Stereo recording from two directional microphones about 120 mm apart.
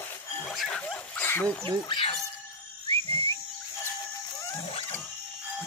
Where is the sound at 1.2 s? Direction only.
15° left (ahead or behind).